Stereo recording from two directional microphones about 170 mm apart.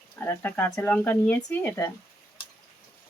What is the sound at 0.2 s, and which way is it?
Speech, 10° left (ahead or behind).